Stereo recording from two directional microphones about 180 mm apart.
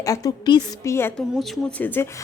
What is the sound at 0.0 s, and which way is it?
Speech, 20° left (ahead or behind).